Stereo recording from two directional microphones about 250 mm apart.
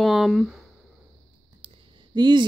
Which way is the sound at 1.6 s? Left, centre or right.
Centre.